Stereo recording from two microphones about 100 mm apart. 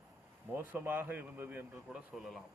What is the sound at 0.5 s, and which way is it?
Speech, 20° right (ahead or behind).